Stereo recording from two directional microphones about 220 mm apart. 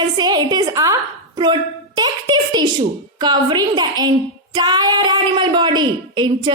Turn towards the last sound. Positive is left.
turn(degrees=-20)  # may be behind; listen again after turning